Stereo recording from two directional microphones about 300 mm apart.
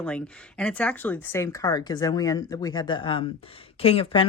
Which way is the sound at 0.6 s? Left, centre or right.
Centre.